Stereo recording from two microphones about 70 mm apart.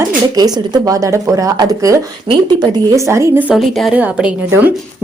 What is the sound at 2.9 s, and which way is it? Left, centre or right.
Speech, right.